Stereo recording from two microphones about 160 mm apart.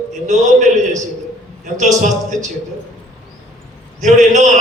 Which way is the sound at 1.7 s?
50° right (ahead or behind).